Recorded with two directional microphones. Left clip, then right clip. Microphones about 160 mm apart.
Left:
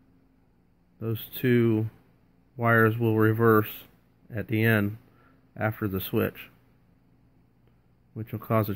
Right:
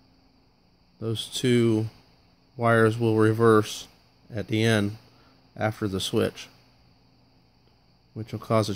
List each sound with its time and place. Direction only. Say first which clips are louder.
0.9 s speech: right 5 dB; 20° right (ahead or behind)
8.1 s speech: right 2 dB; 20° right (ahead or behind)